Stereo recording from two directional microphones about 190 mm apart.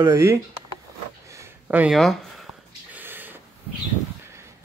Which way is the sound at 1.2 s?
15° right (ahead or behind).